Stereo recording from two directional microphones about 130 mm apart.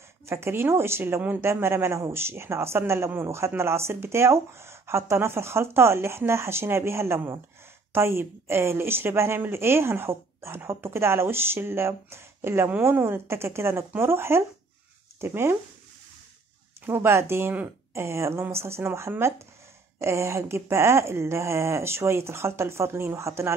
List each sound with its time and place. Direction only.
0.3 s a woman's voice: 20° right (ahead or behind)
16.8 s a woman's voice: 20° right (ahead or behind)